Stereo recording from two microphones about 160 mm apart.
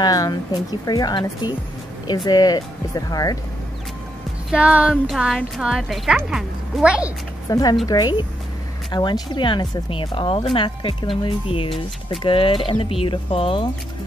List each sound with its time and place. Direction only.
0.0 s a woman's voice: 25° left (ahead or behind)
4.5 s a woman's voice: 5° right (ahead or behind)
7.4 s a woman's voice: 20° left (ahead or behind)